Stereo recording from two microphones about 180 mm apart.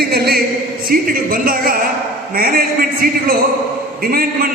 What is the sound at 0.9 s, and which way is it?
A man's voice, 55° right (ahead or behind).